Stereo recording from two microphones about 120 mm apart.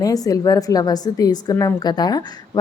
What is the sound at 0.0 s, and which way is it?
A woman's voice, 30° left (ahead or behind).